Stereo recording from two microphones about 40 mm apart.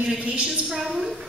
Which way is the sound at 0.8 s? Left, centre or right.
Centre.